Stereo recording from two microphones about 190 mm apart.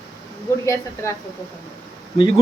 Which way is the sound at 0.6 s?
15° left (ahead or behind).